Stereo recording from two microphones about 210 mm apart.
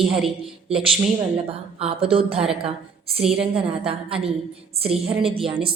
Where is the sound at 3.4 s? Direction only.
25° right (ahead or behind).